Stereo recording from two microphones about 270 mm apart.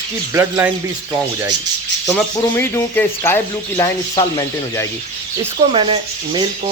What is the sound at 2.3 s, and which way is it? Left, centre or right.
Speech, centre.